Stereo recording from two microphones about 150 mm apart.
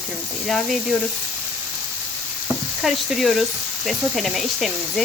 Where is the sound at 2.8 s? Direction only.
Centre (ahead or behind).